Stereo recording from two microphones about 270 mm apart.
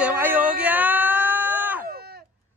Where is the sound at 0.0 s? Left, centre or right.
Centre.